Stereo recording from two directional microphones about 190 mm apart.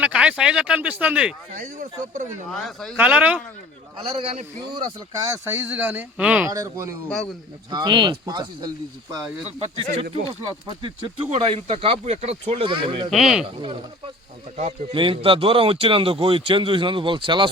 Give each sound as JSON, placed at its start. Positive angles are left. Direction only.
{"t": 0.0, "sound": "speech", "side_deg": -5}
{"t": 1.5, "sound": "speech", "side_deg": -40}
{"t": 2.5, "sound": "speech", "side_deg": 0}
{"t": 4.0, "sound": "a man's voice", "side_deg": -35}
{"t": 4.9, "sound": "speech", "side_deg": -15}
{"t": 6.5, "sound": "speech", "side_deg": -15}
{"t": 9.7, "sound": "speech", "side_deg": -25}
{"t": 13.1, "sound": "speech", "side_deg": 0}
{"t": 14.9, "sound": "speech", "side_deg": -30}